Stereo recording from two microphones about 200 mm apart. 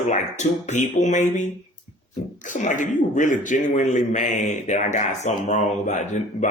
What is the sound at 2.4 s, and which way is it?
Speech, 40° left (ahead or behind).